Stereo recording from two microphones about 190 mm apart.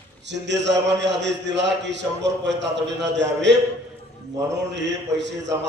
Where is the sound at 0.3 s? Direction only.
65° right (ahead or behind).